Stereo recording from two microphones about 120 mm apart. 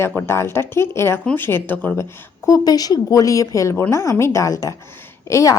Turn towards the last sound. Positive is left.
turn(degrees=25)  # may be behind; listen again after turning